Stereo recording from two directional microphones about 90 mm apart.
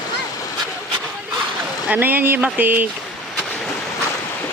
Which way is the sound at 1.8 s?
20° right (ahead or behind).